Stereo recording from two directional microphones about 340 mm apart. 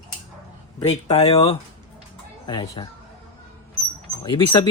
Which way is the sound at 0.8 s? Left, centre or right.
Centre.